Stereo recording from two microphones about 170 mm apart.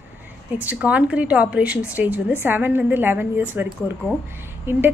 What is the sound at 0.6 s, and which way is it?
A woman's voice, 10° right (ahead or behind).